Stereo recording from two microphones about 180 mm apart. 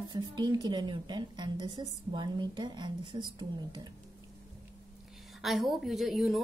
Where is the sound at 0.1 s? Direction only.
25° right (ahead or behind).